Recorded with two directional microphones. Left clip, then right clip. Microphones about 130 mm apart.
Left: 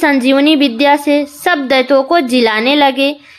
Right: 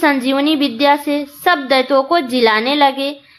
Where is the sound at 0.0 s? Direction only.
40° left (ahead or behind).